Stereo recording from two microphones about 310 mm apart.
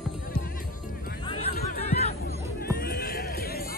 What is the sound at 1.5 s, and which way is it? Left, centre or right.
Music, left.